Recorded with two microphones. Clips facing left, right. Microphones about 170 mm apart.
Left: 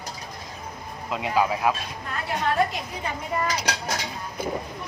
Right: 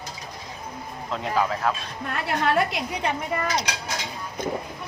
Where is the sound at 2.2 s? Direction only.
75° right (ahead or behind).